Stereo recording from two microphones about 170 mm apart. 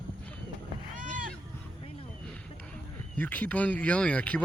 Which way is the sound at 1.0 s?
50° right (ahead or behind).